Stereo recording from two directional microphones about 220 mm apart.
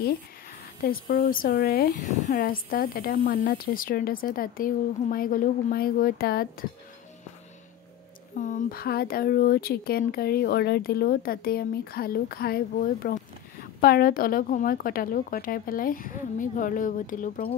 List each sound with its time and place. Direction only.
0.8 s speech: 40° left (ahead or behind)
8.4 s speech: 35° left (ahead or behind)